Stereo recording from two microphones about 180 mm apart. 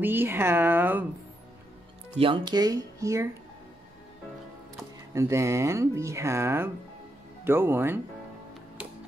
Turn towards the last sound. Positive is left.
turn(degrees=-10)  # may be behind; listen again after turning